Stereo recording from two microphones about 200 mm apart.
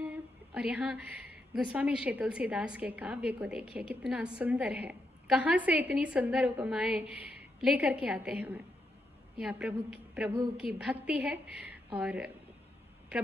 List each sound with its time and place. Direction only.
0.6 s a woman's voice: 5° right (ahead or behind)